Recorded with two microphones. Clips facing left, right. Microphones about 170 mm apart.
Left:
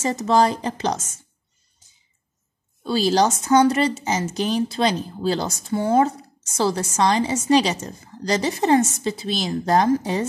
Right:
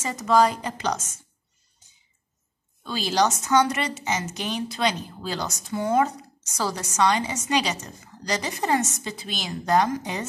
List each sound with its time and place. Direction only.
0.0 s a woman's voice: 30° left (ahead or behind)
2.8 s a woman's voice: 35° left (ahead or behind)